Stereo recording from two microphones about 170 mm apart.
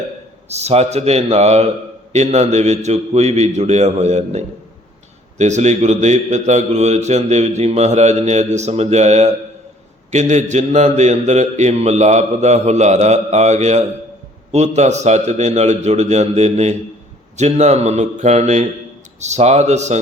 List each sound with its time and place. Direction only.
0.4 s a man's voice: 40° right (ahead or behind)